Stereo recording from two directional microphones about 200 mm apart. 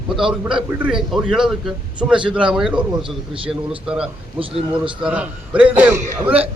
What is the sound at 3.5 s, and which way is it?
A man's voice, 5° right (ahead or behind).